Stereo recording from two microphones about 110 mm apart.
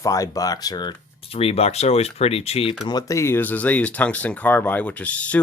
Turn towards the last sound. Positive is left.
turn(degrees=10)  # may be behind; listen again after turning